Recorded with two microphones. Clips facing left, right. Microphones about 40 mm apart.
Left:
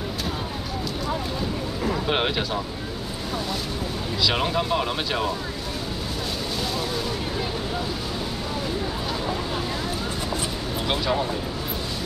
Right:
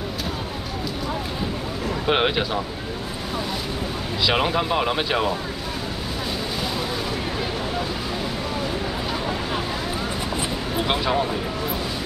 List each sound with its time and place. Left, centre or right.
2.0 s speech: centre
4.3 s speech: centre
10.9 s speech: centre